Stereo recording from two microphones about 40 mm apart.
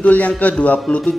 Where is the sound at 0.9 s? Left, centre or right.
Centre.